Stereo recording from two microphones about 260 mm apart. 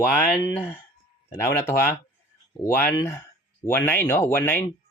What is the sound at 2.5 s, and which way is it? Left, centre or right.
Speech, centre.